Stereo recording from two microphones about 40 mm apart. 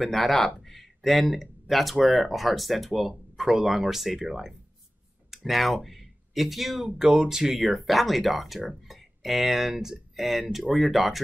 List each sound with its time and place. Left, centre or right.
0.0 s speech: centre
6.9 s speech: right
7.6 s speech: centre